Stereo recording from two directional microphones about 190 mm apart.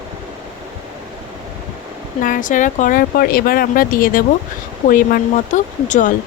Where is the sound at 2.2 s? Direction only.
45° left (ahead or behind).